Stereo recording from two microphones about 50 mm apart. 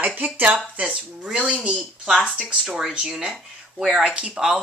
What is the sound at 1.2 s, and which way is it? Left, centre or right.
Speech, centre.